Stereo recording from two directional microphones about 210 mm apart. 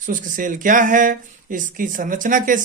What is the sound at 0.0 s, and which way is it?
Speech, 40° right (ahead or behind).